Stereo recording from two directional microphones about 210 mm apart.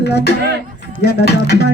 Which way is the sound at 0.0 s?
50° left (ahead or behind).